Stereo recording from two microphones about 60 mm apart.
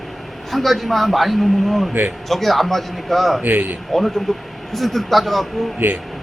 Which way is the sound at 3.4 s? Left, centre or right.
Right.